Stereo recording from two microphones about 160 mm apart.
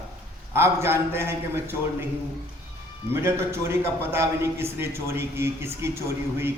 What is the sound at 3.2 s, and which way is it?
A man's voice, 15° right (ahead or behind).